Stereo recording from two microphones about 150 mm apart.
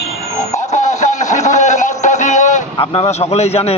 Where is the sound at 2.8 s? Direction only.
45° left (ahead or behind).